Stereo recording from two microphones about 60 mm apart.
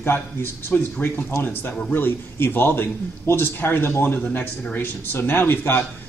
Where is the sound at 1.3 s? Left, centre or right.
Left.